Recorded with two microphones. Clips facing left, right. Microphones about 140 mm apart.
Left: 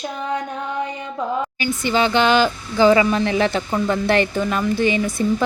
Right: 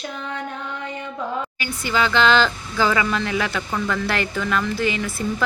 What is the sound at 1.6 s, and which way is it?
Speech, 20° left (ahead or behind).